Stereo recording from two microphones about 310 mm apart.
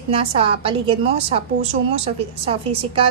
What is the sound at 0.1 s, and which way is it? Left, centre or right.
A woman's voice, centre.